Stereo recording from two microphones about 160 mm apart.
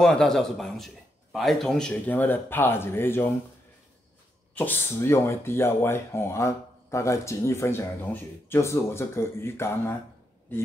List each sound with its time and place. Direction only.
0.0 s a man's voice: 5° left (ahead or behind)
4.6 s speech: 15° left (ahead or behind)